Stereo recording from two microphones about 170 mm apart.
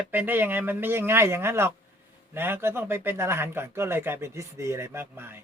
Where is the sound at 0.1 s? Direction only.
10° right (ahead or behind).